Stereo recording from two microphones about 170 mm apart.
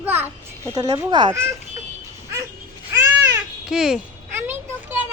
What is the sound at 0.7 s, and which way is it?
Speech, 20° right (ahead or behind).